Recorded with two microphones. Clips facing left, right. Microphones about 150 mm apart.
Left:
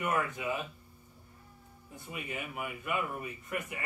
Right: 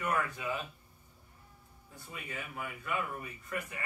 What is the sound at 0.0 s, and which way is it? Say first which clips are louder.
Speech: left 2 dB; 20° left (ahead or behind).